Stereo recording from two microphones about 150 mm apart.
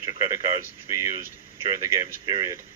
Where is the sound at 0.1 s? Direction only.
25° right (ahead or behind).